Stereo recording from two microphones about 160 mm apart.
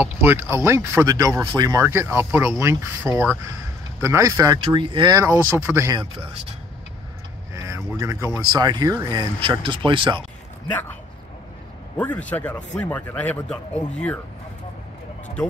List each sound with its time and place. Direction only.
0.0 s speech: 10° right (ahead or behind)
7.5 s speech: 20° right (ahead or behind)
12.0 s a man's voice: 10° left (ahead or behind)